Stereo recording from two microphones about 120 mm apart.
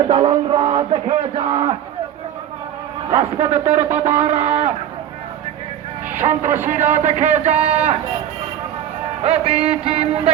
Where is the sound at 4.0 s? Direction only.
60° right (ahead or behind).